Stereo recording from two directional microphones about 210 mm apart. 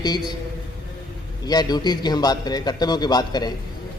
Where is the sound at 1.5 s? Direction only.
20° left (ahead or behind).